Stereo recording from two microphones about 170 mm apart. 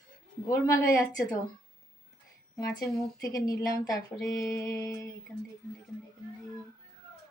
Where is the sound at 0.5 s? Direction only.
20° left (ahead or behind).